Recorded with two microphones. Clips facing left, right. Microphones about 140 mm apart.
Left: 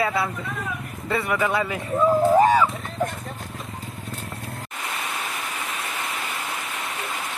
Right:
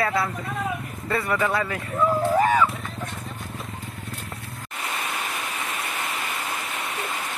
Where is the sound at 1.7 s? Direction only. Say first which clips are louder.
Left 3 dB; 15° left (ahead or behind).